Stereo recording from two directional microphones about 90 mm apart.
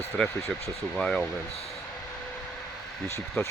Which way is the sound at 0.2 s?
10° left (ahead or behind).